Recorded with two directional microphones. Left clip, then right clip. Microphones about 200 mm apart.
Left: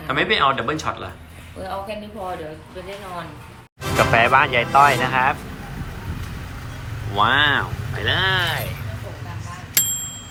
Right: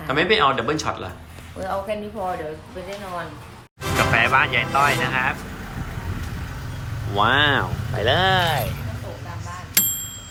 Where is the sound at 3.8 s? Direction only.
Centre (ahead or behind).